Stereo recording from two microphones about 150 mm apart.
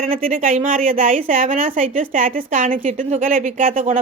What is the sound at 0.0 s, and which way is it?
A woman's voice, 65° right (ahead or behind).